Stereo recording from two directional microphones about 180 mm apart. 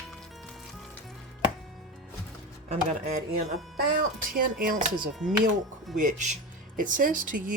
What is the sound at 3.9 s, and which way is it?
Speech, 50° right (ahead or behind).